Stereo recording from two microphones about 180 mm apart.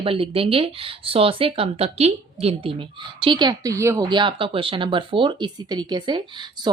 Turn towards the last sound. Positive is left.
turn(degrees=-25)  # may be behind; listen again after turning